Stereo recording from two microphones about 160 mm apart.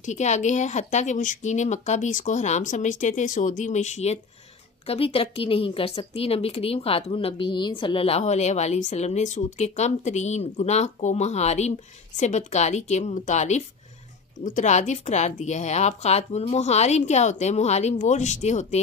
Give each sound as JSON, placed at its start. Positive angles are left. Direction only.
{"t": 0.0, "sound": "a woman's voice", "side_deg": 45}